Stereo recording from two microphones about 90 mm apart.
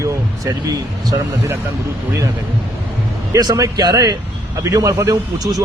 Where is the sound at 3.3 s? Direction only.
40° right (ahead or behind).